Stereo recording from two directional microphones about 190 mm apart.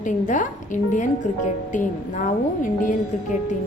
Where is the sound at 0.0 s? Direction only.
40° left (ahead or behind).